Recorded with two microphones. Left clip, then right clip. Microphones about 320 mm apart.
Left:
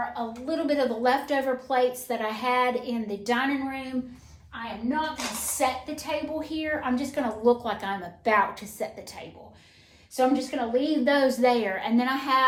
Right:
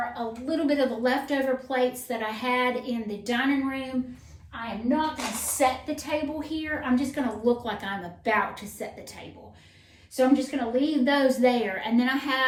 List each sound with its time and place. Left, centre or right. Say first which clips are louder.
0.1 s a woman's voice: even; centre
4.9 s a woman's voice: right 2 dB; centre
10.2 s a woman's voice: right 1 dB; centre